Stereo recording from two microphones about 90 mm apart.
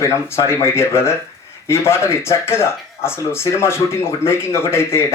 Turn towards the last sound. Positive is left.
turn(degrees=30)  # may be behind; listen again after turning